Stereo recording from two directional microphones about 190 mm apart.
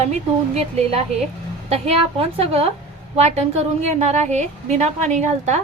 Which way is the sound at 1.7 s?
30° right (ahead or behind).